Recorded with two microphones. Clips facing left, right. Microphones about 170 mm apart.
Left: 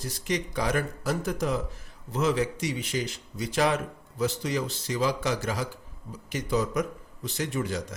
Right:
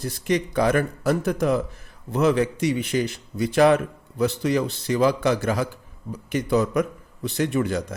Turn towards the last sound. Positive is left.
turn(degrees=-60)  # may be behind; listen again after turning